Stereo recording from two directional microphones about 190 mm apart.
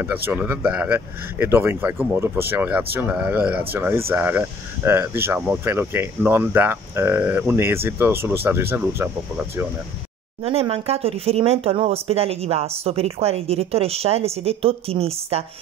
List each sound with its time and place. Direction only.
0.0 s speech: 10° right (ahead or behind)
10.4 s speech: 30° right (ahead or behind)